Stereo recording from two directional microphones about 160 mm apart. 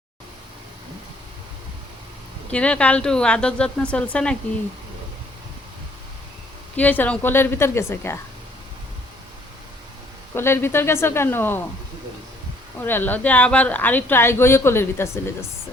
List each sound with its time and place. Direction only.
2.5 s speech: 5° left (ahead or behind)
6.7 s speech: 10° left (ahead or behind)
10.3 s speech: 15° left (ahead or behind)
12.8 s speech: 10° left (ahead or behind)